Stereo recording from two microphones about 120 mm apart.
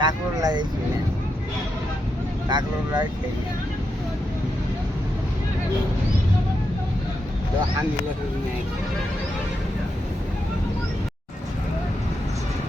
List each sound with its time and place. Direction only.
0.0 s vehicle: 35° right (ahead or behind)
2.5 s speech: 35° right (ahead or behind)